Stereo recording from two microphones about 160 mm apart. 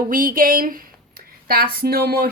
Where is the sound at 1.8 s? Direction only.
70° right (ahead or behind).